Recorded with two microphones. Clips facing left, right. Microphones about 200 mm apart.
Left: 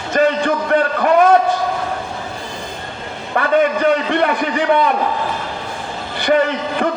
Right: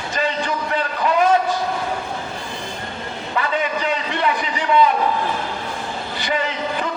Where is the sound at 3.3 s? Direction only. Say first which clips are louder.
Left 8 dB; 55° left (ahead or behind).